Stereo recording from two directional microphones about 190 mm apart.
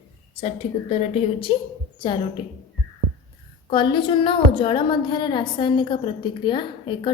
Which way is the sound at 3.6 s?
25° left (ahead or behind).